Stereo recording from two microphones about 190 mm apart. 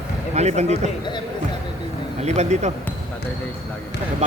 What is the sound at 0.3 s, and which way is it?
Speech, 35° right (ahead or behind).